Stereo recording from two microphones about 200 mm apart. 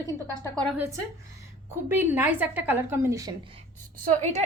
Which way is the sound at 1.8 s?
10° right (ahead or behind).